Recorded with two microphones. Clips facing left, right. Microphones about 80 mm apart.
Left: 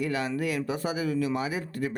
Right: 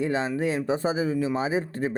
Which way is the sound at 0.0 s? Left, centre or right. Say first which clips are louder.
Right 3 dB; right.